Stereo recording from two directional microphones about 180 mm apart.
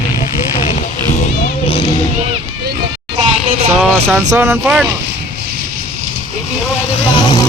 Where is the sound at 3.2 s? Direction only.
35° right (ahead or behind).